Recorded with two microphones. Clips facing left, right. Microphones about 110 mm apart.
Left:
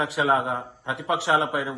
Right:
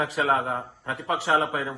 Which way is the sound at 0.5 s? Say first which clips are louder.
Left 1 dB; 15° left (ahead or behind).